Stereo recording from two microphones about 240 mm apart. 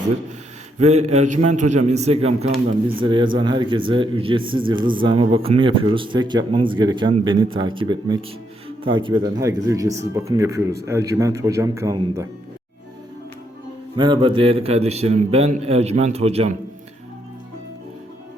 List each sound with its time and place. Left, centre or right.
0.8 s speech: right; by 12.3 s centre
13.9 s speech: centre